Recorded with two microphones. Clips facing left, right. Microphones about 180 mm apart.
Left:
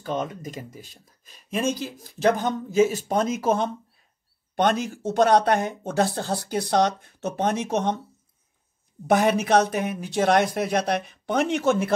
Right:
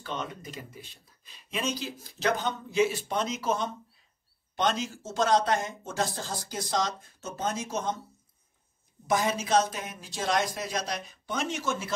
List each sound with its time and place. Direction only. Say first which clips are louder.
0.0 s speech: left 8 dB; 45° left (ahead or behind); by 8.0 s 65° left (ahead or behind)
9.0 s speech: left 7 dB; 65° left (ahead or behind)